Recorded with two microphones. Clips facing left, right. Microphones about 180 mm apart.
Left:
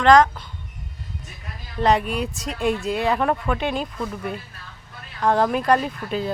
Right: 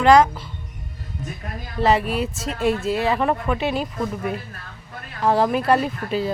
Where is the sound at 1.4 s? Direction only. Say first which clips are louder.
Right 5 dB; 50° right (ahead or behind).